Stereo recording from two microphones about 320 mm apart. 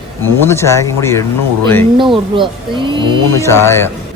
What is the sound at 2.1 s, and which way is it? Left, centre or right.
Speech, centre.